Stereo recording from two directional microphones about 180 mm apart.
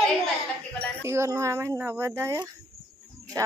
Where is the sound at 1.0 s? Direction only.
15° right (ahead or behind).